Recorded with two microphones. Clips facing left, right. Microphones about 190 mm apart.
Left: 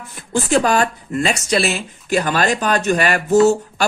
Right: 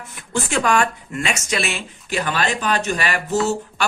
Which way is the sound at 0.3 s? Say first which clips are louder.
Left 4 dB; 35° left (ahead or behind).